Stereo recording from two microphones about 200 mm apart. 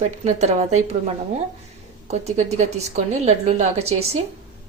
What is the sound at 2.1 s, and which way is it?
A woman's voice, 35° right (ahead or behind).